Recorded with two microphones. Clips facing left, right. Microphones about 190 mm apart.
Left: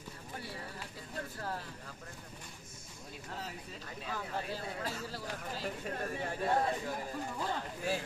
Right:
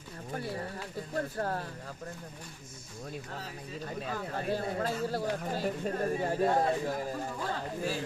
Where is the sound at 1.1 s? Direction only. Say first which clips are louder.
Right 8 dB; 50° right (ahead or behind).